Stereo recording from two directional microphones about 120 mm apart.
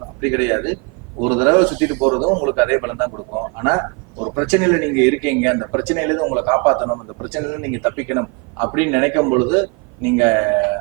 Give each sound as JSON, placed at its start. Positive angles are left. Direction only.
{"t": 0.2, "sound": "a man's voice", "side_deg": -15}